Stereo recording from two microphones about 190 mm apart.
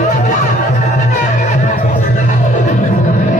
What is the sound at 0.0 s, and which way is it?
Music, 40° left (ahead or behind).